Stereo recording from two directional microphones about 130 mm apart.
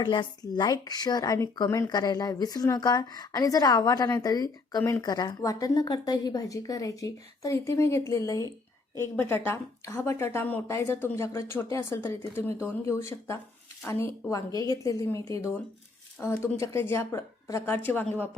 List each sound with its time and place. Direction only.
0.0 s speech: 35° left (ahead or behind); by 18.0 s 15° left (ahead or behind)